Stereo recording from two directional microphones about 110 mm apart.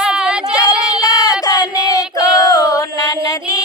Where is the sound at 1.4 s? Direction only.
35° left (ahead or behind).